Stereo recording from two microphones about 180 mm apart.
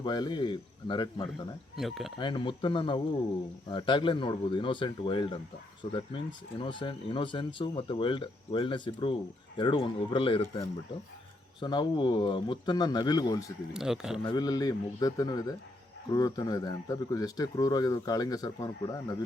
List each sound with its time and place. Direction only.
0.0 s speech: 25° left (ahead or behind)
1.7 s speech: centre (ahead or behind)
2.1 s speech: 25° left (ahead or behind)
11.6 s speech: 25° left (ahead or behind)
13.7 s speech: 5° right (ahead or behind)
14.3 s speech: 20° left (ahead or behind)